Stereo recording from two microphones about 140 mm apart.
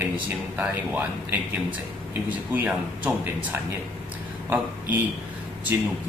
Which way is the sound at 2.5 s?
10° right (ahead or behind).